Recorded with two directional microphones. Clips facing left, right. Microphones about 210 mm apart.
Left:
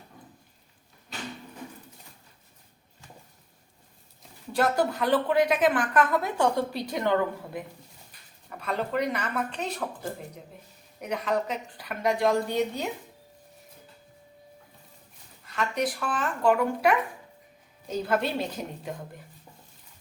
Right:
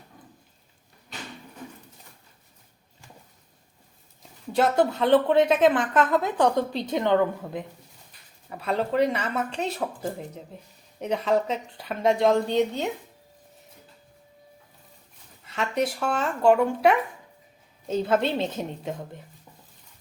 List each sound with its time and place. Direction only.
4.6 s a woman's voice: 25° right (ahead or behind)
11.0 s a woman's voice: 30° right (ahead or behind)
15.4 s a woman's voice: 25° right (ahead or behind)